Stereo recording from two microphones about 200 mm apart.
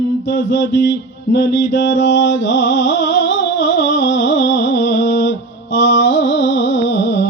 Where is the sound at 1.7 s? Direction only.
65° left (ahead or behind).